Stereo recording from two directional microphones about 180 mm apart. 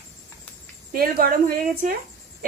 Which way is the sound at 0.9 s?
55° right (ahead or behind).